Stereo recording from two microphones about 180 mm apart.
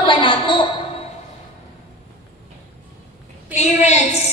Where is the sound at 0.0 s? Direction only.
25° left (ahead or behind).